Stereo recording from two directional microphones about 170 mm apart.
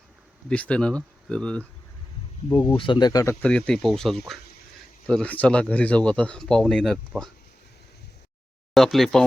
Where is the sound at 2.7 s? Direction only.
30° left (ahead or behind).